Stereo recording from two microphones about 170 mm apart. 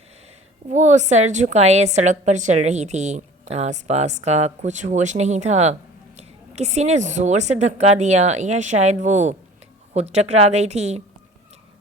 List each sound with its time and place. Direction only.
0.7 s a woman's voice: 45° right (ahead or behind)